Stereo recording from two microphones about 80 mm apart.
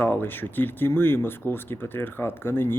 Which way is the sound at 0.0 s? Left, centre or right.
Left.